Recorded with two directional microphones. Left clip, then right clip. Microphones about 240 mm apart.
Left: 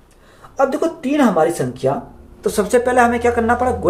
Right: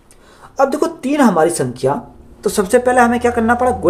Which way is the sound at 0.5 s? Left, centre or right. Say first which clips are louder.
Right 2 dB; right.